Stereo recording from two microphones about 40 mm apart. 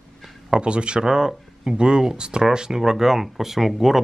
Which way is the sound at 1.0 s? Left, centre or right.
Centre.